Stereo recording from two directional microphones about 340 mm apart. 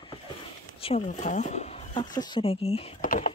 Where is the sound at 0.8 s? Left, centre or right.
Centre.